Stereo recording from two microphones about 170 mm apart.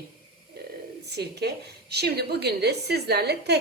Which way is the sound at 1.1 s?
75° right (ahead or behind).